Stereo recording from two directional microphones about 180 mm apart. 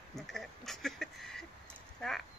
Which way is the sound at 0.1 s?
Centre (ahead or behind).